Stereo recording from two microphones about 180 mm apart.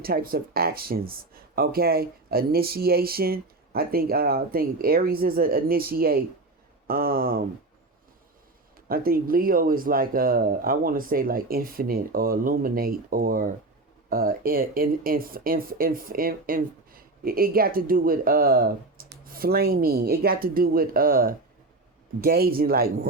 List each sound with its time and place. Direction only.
0.0 s speech: 55° right (ahead or behind)
8.9 s speech: 55° right (ahead or behind)